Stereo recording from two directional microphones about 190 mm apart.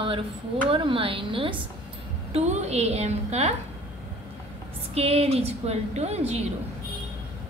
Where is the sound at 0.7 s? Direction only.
25° right (ahead or behind).